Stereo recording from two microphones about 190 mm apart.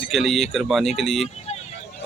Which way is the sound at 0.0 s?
Centre (ahead or behind).